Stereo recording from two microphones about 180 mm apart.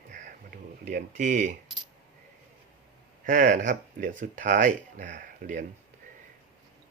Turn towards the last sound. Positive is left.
turn(degrees=-45)  # may be behind; listen again after turning